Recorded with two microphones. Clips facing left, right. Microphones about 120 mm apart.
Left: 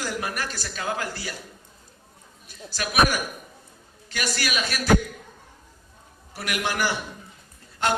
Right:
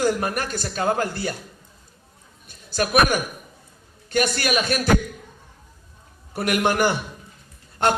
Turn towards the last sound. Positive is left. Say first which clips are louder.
# right 4 dB
turn(degrees=-55)  # may be behind; listen again after turning